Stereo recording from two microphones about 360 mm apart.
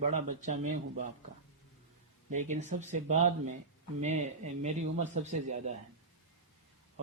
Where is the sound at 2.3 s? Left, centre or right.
Centre.